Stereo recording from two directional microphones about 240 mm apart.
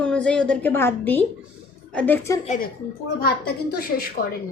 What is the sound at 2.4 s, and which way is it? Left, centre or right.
A woman's voice, left.